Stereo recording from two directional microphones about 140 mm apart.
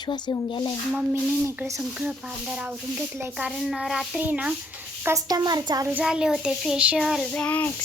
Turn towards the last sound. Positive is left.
turn(degrees=10)  # may be behind; listen again after turning